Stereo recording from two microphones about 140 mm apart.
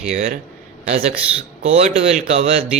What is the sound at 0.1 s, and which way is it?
Speech, 70° right (ahead or behind).